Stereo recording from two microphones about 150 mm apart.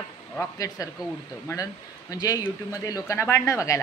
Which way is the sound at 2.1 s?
25° left (ahead or behind).